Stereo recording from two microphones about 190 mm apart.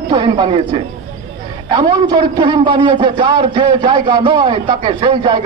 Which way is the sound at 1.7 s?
20° right (ahead or behind).